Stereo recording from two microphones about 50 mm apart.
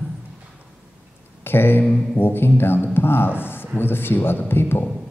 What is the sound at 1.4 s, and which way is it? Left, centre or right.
Speech, left.